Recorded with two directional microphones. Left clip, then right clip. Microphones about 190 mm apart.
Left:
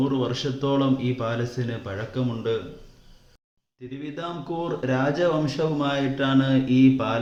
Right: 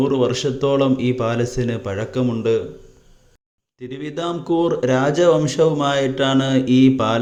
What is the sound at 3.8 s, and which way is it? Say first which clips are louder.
A man's voice: right 8 dB; 55° right (ahead or behind).